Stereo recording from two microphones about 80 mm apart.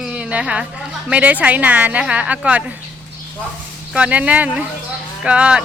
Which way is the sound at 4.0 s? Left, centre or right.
Centre.